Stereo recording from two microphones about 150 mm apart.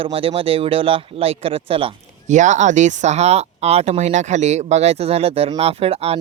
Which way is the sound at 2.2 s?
55° right (ahead or behind).